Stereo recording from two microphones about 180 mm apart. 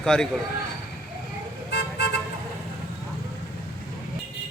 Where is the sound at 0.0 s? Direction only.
5° left (ahead or behind).